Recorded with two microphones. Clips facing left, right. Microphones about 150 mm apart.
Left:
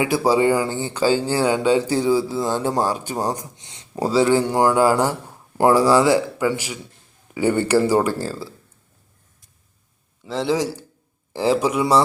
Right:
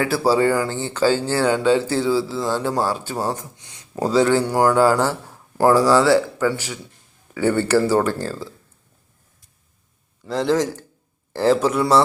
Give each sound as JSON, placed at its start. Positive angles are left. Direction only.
{"t": 0.0, "sound": "speech", "side_deg": 15}
{"t": 4.0, "sound": "speech", "side_deg": 10}
{"t": 10.2, "sound": "speech", "side_deg": 0}